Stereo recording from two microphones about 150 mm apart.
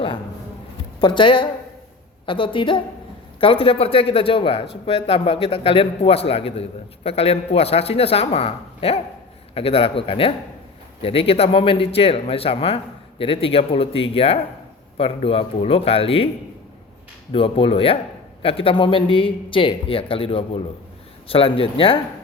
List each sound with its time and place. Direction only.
1.0 s a man's voice: 30° left (ahead or behind)
17.3 s a man's voice: 35° left (ahead or behind)